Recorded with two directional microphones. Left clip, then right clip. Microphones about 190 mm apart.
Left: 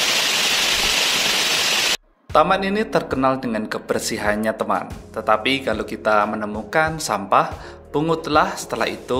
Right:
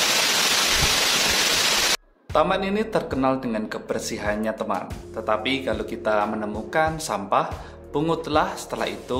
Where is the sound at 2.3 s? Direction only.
20° left (ahead or behind).